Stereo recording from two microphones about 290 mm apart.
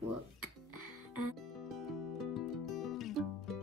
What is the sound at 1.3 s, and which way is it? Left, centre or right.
Music, centre.